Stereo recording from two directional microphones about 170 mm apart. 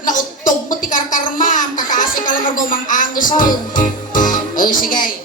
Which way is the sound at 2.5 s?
50° left (ahead or behind).